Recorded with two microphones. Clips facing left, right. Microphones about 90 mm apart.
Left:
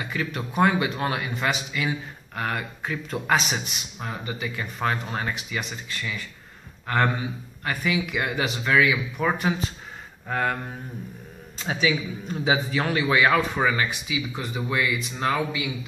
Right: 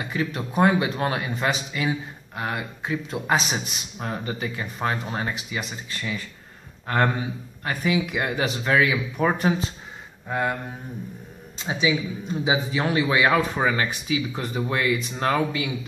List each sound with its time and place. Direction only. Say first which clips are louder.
0.0 s speech: right 2 dB; 25° right (ahead or behind)
4.6 s speech: left 2 dB; 25° right (ahead or behind)
7.6 s speech: right 2 dB; 30° right (ahead or behind)
10.3 s speech: even; 15° right (ahead or behind)
11.6 s speech: right 1 dB; 15° right (ahead or behind)
13.7 s speech: right 2 dB; 40° right (ahead or behind)